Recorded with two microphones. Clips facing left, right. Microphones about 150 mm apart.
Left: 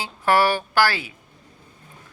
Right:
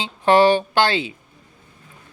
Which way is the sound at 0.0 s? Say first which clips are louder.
Right 5 dB; 20° right (ahead or behind).